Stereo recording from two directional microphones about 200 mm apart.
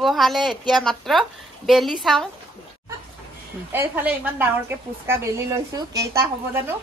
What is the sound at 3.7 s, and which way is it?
A woman's voice, 10° right (ahead or behind).